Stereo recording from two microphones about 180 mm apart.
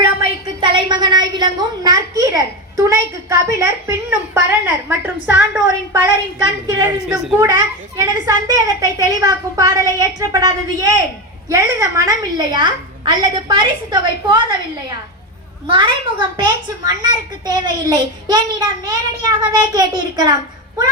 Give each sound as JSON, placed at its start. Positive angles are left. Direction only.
{"t": 0.4, "sound": "a sound", "side_deg": -25}
{"t": 4.4, "sound": "a woman's voice", "side_deg": -10}
{"t": 7.1, "sound": "a woman's voice", "side_deg": 0}
{"t": 7.3, "sound": "a child's voice", "side_deg": -20}